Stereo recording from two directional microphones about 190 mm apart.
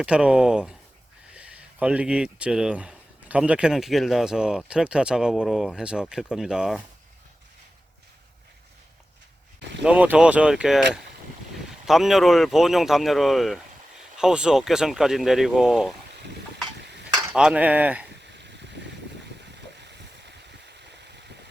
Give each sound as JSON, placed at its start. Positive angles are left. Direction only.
{"t": 0.0, "sound": "speech", "side_deg": -5}
{"t": 9.8, "sound": "speech", "side_deg": -5}
{"t": 11.9, "sound": "speech", "side_deg": 0}
{"t": 17.3, "sound": "speech", "side_deg": -5}
{"t": 18.3, "sound": "boat", "side_deg": -65}
{"t": 19.7, "sound": "waves", "side_deg": -65}